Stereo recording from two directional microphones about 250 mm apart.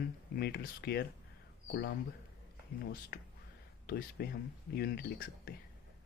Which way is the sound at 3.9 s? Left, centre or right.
Left.